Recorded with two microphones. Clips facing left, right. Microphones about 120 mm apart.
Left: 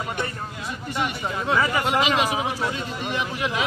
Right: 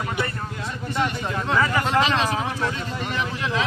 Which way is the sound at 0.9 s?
10° left (ahead or behind).